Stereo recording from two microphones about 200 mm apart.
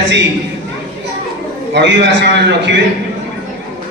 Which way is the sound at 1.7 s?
60° right (ahead or behind).